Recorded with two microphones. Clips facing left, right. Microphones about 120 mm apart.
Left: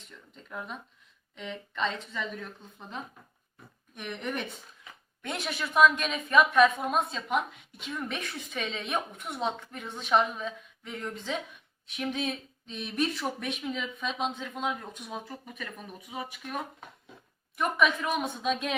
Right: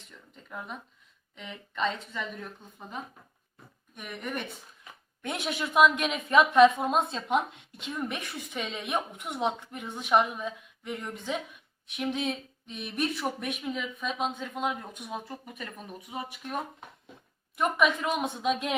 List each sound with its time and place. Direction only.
1.4 s a woman's voice: 5° right (ahead or behind)
5.2 s a woman's voice: 15° right (ahead or behind)
7.9 s speech: 15° right (ahead or behind)
17.6 s speech: 15° right (ahead or behind)